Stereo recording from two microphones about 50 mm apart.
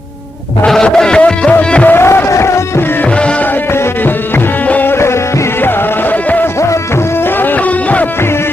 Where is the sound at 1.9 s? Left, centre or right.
Left.